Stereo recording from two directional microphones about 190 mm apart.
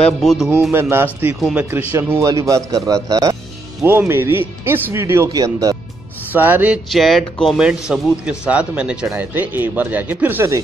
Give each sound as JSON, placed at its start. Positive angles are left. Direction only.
{"t": 0.2, "sound": "speech", "side_deg": 0}